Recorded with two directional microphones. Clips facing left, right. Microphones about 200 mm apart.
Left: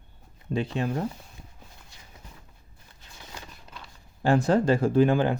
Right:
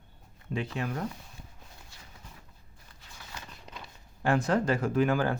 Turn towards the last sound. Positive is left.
turn(degrees=25)  # may be behind; listen again after turning